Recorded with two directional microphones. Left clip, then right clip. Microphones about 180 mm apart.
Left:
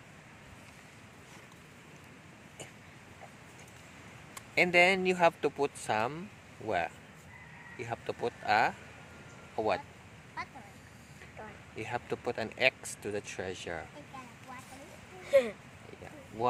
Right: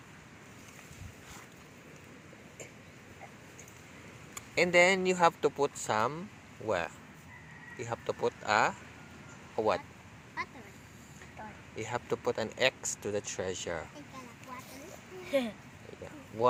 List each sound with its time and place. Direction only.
4.5 s speech: 5° left (ahead or behind)
11.8 s speech: centre (ahead or behind)
15.3 s speech: 35° left (ahead or behind)